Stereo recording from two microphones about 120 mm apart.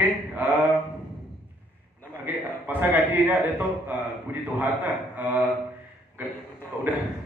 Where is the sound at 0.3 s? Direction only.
15° right (ahead or behind).